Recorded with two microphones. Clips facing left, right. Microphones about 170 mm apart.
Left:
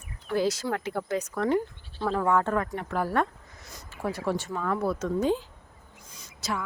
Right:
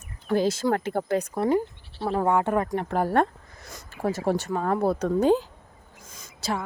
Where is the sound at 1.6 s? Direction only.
20° right (ahead or behind).